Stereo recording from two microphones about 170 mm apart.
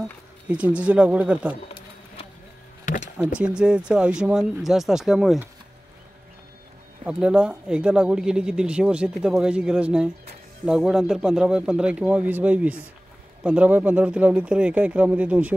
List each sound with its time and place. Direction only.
0.0 s speech: 5° right (ahead or behind)
2.8 s music: 50° left (ahead or behind)
3.3 s speech: 5° right (ahead or behind)
7.1 s speech: 5° right (ahead or behind)